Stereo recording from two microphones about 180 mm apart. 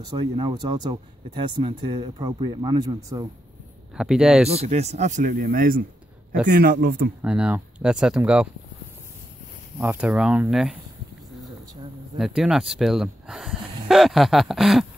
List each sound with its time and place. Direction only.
0.0 s speech: 25° right (ahead or behind)
3.9 s speech: 5° right (ahead or behind)
4.5 s a man's voice: 35° right (ahead or behind); by 7.1 s 60° right (ahead or behind)
7.2 s speech: 5° right (ahead or behind)
9.8 s speech: 10° right (ahead or behind)
12.2 s speech: 5° right (ahead or behind)